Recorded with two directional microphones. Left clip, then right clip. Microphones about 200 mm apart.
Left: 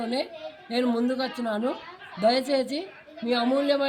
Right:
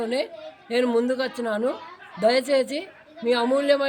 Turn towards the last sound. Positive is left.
turn(degrees=-20)  # may be behind; listen again after turning